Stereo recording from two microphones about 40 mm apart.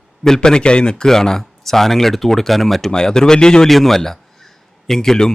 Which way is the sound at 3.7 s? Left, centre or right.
Centre.